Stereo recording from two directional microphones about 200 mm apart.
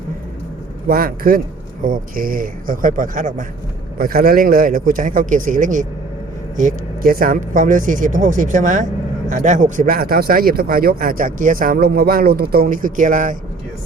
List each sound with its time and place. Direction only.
0.9 s speech: 45° right (ahead or behind)